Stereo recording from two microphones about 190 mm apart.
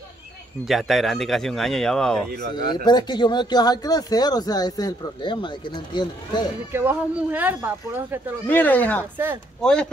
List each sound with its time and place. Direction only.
0.7 s speech: centre (ahead or behind)
2.5 s speech: 25° left (ahead or behind)
6.7 s speech: 10° right (ahead or behind)
8.5 s speech: 10° left (ahead or behind)